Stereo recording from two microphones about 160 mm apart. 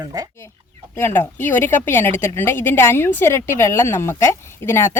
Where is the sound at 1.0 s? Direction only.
15° left (ahead or behind).